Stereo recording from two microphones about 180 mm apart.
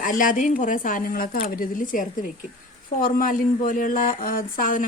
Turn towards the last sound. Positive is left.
turn(degrees=50)  # may be behind; listen again after turning